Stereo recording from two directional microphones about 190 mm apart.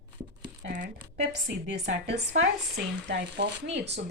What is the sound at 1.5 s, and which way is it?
Speech, 65° right (ahead or behind).